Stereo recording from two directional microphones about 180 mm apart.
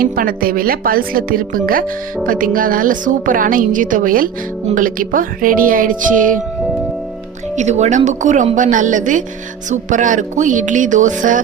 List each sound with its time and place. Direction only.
0.0 s speech: 50° right (ahead or behind)
7.5 s speech: 40° right (ahead or behind)